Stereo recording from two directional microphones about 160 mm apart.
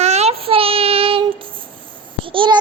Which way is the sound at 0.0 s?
40° right (ahead or behind).